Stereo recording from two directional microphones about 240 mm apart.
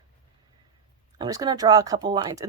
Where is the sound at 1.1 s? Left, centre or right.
Centre.